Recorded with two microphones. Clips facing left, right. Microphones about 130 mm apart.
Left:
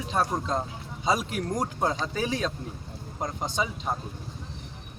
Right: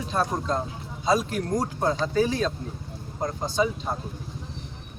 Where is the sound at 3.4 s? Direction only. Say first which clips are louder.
Right 5 dB; 20° left (ahead or behind).